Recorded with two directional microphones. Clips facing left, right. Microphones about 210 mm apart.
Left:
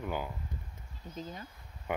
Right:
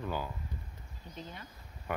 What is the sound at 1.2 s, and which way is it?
Speech, 40° left (ahead or behind).